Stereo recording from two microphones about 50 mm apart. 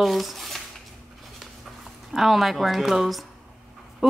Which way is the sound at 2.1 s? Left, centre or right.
Centre.